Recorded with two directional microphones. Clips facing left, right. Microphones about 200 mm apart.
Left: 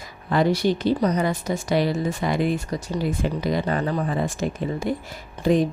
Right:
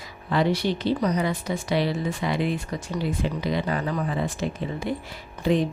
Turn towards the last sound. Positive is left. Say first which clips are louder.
# left 3 dB
turn(degrees=45)  # may be behind; listen again after turning